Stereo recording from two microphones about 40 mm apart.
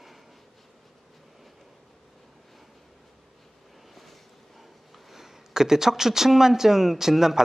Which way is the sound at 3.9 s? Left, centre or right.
Centre.